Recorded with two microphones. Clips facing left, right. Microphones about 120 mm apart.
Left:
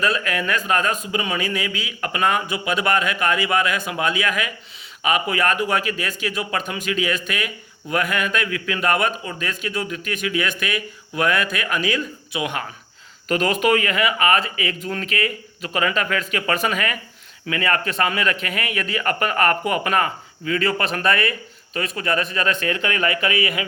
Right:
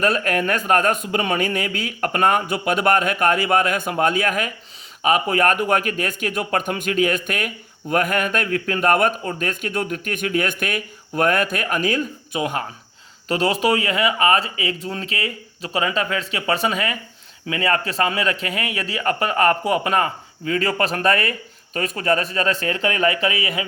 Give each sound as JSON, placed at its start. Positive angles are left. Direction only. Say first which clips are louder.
{"t": 0.0, "sound": "a man's voice", "louder": "right 3 dB", "side_deg": -50}